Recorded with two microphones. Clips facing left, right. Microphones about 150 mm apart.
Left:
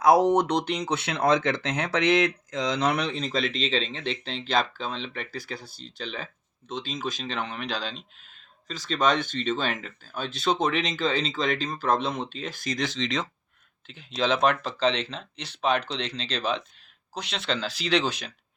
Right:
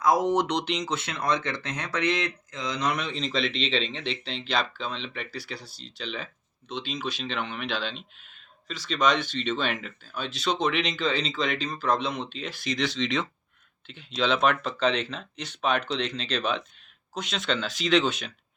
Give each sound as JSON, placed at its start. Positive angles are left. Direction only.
{"t": 0.0, "sound": "speech", "side_deg": 75}